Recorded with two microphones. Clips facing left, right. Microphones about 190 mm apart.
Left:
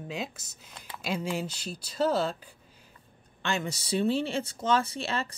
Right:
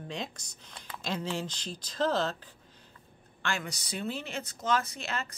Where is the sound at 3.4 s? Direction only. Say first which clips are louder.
Left 4 dB; 20° left (ahead or behind).